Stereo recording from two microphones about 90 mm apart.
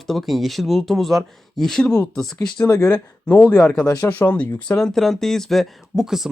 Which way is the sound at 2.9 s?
15° left (ahead or behind).